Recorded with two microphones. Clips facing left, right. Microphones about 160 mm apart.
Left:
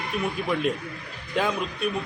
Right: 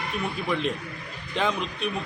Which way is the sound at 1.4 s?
5° left (ahead or behind).